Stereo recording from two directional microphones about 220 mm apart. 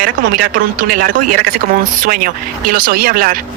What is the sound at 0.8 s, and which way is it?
Speech, 40° right (ahead or behind).